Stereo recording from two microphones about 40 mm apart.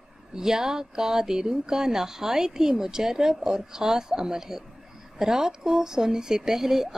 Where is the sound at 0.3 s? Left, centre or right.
Centre.